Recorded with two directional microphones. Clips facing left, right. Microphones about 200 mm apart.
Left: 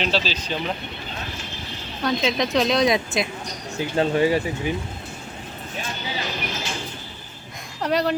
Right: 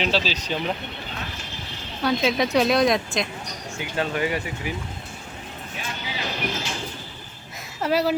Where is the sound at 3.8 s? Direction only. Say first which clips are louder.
Left 6 dB; 30° left (ahead or behind).